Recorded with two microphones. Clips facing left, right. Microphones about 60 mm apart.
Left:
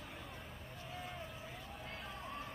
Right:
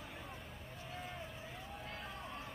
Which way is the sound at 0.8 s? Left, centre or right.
Centre.